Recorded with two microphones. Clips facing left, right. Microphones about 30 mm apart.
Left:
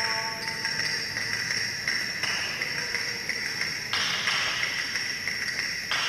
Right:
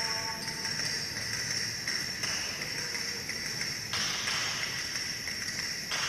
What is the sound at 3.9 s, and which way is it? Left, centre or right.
Music, left.